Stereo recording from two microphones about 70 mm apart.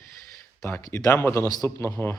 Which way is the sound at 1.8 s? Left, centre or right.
Left.